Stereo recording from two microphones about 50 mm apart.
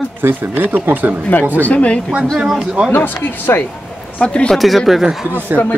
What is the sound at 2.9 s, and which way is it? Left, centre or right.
Speech, left.